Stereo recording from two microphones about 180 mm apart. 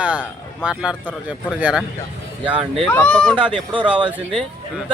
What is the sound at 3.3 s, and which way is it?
Speech, 30° right (ahead or behind).